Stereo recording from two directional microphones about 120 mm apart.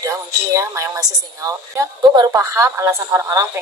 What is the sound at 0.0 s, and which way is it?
A woman's voice, 25° right (ahead or behind).